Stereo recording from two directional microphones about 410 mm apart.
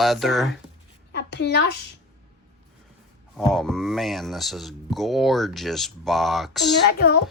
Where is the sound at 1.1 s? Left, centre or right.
Left.